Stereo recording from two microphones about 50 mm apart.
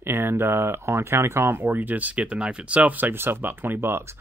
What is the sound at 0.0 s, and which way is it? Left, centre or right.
Speech, right.